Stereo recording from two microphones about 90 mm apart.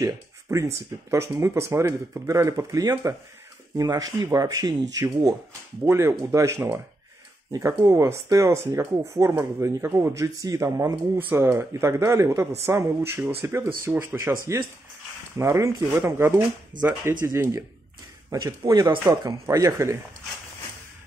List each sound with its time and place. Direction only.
0.0 s speech: 35° right (ahead or behind)
11.1 s a woman's voice: 25° right (ahead or behind)
15.3 s a woman's voice: 35° right (ahead or behind)
18.7 s speech: 45° right (ahead or behind)
19.0 s speech: 35° right (ahead or behind)